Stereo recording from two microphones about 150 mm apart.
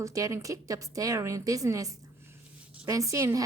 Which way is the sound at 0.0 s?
20° right (ahead or behind).